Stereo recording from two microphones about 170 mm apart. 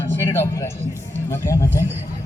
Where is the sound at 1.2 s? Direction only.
20° left (ahead or behind).